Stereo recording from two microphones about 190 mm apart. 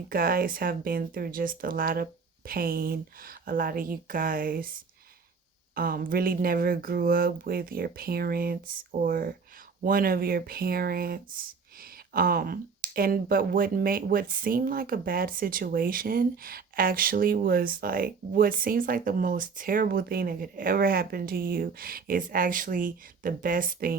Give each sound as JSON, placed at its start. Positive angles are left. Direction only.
{"t": 0.1, "sound": "speech", "side_deg": -50}
{"t": 5.7, "sound": "speech", "side_deg": -50}